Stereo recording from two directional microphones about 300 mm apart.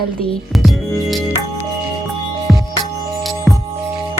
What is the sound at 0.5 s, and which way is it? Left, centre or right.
Music, centre.